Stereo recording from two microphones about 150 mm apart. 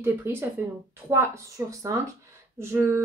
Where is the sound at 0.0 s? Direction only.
15° right (ahead or behind).